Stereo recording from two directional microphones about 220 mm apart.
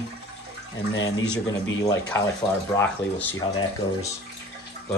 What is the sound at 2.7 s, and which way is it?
Speech, 10° left (ahead or behind).